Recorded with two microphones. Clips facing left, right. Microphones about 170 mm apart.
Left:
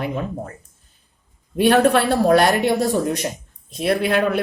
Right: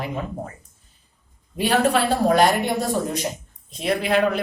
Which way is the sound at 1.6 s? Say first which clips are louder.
Left 4 dB; 65° left (ahead or behind).